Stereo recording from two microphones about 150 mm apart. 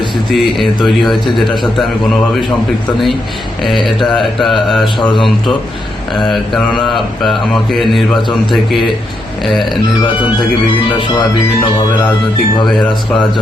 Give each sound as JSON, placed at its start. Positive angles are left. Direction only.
{"t": 0.3, "sound": "mantra", "side_deg": 0}
{"t": 3.8, "sound": "mantra", "side_deg": 0}
{"t": 6.3, "sound": "mantra", "side_deg": 0}
{"t": 10.0, "sound": "speech", "side_deg": 30}